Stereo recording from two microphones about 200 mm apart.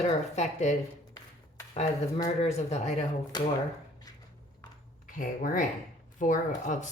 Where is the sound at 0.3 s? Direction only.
35° left (ahead or behind).